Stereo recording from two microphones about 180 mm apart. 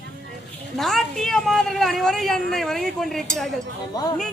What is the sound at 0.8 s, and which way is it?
A woman's voice, centre (ahead or behind).